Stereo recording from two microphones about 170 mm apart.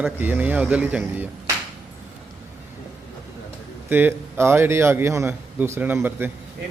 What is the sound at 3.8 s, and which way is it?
A man's voice, 15° right (ahead or behind).